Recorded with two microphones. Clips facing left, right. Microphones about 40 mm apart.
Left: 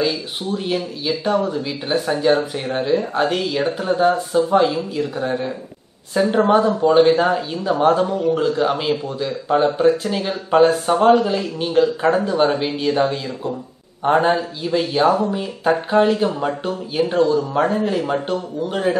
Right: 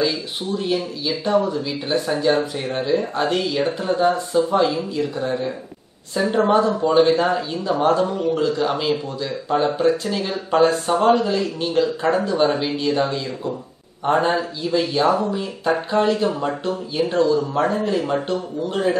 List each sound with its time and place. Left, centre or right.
0.0 s a man's voice: centre
15.0 s a man's voice: centre
15.9 s speech: centre